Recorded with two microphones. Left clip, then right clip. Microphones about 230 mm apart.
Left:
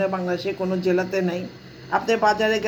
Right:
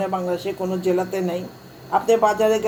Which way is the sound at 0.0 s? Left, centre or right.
Left.